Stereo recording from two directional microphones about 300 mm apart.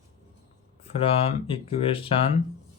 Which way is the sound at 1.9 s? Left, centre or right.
Centre.